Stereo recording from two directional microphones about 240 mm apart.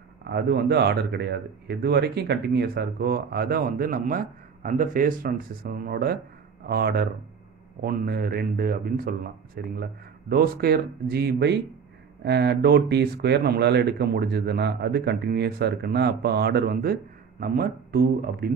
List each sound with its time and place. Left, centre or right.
0.2 s speech: right